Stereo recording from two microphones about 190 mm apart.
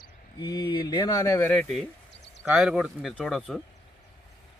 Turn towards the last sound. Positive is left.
turn(degrees=0)  # may be behind; listen again after turning